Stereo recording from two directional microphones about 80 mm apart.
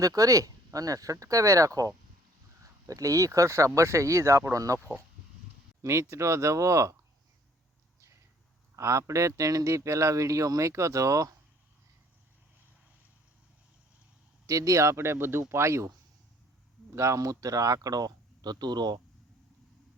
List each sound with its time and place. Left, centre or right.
0.0 s speech: right
4.8 s speech: right
5.8 s speech: right
8.7 s speech: right
14.4 s speech: right
16.9 s speech: right